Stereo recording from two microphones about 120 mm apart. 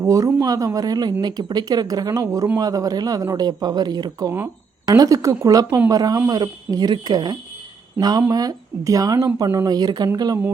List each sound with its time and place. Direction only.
0.0 s speech: 25° right (ahead or behind)